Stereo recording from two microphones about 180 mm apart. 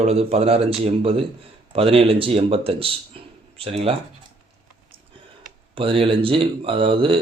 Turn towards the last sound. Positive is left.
turn(degrees=-30)  # may be behind; listen again after turning